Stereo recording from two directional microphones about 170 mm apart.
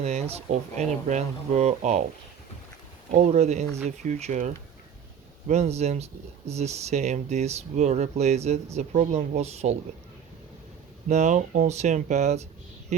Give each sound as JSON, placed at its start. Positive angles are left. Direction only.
{"t": 0.0, "sound": "speech", "side_deg": -40}
{"t": 3.1, "sound": "speech", "side_deg": -45}
{"t": 11.1, "sound": "speech", "side_deg": -45}